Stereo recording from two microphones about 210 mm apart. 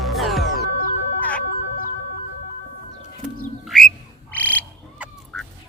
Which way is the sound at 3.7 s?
Centre (ahead or behind).